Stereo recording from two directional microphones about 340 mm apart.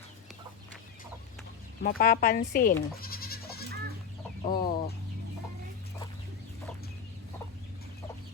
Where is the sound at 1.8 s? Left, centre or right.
Left.